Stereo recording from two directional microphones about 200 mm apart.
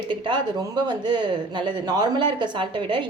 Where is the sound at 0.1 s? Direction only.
25° right (ahead or behind).